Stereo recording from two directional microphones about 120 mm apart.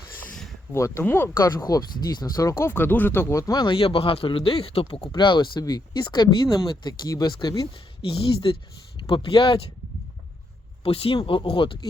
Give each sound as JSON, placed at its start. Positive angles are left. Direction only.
{"t": 0.3, "sound": "a sound", "side_deg": 5}
{"t": 0.7, "sound": "speech", "side_deg": 25}
{"t": 1.4, "sound": "speech", "side_deg": 35}
{"t": 8.0, "sound": "speech", "side_deg": 50}
{"t": 10.8, "sound": "speech", "side_deg": 50}